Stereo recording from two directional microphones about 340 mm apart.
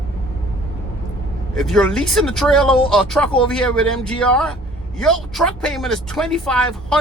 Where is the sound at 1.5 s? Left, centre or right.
Centre.